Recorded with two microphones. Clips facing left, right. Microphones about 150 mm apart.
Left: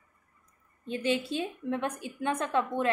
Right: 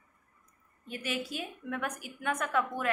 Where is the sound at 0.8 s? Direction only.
25° left (ahead or behind).